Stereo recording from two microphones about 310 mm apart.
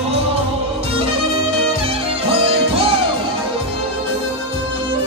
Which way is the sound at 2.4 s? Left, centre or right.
Centre.